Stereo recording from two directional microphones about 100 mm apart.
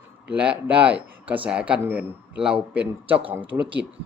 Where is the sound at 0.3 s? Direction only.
10° right (ahead or behind).